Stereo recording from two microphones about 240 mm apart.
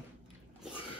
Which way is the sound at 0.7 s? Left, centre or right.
Left.